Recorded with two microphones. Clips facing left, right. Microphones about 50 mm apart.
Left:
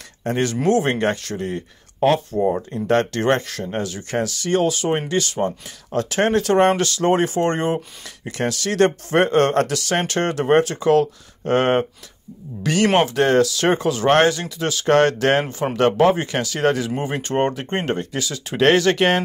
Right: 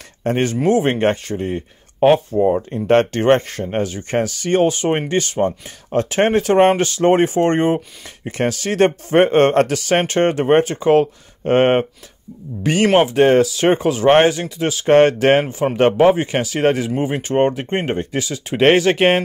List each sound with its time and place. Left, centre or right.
0.2 s speech: right
0.6 s speech: centre
2.7 s speech: right
12.8 s speech: centre